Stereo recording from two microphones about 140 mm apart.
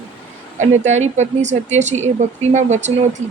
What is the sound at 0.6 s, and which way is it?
Speech, 55° right (ahead or behind).